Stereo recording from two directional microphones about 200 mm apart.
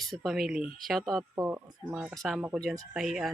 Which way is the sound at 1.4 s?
15° right (ahead or behind).